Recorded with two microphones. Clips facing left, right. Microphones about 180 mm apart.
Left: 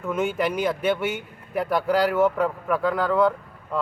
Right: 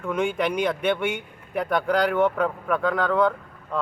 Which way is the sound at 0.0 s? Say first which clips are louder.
Even; 5° left (ahead or behind).